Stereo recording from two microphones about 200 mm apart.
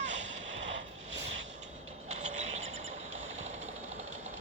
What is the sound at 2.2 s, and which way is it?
Mechanisms, 35° right (ahead or behind).